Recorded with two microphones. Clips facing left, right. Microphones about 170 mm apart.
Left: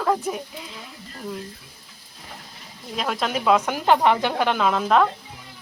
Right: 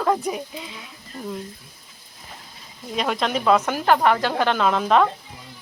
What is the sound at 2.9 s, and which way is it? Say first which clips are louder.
Speech: right 2 dB; centre (ahead or behind).